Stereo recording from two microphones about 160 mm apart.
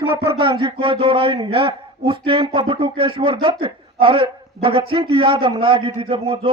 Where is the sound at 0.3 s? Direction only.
30° right (ahead or behind).